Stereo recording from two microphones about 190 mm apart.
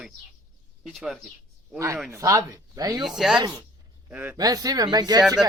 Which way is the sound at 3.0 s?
Centre (ahead or behind).